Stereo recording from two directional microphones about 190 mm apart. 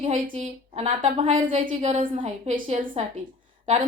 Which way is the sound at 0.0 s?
35° right (ahead or behind).